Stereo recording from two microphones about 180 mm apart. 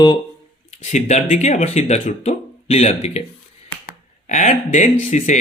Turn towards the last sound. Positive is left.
turn(degrees=45)  # may be behind; listen again after turning